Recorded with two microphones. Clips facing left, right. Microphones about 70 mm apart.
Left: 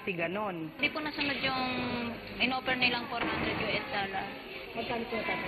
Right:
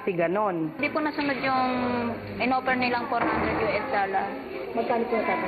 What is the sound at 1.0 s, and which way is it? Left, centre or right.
A woman's voice, right.